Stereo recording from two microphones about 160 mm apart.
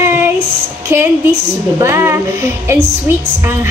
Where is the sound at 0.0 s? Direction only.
15° right (ahead or behind).